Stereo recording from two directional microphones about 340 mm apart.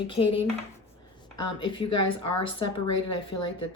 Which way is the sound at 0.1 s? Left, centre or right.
Centre.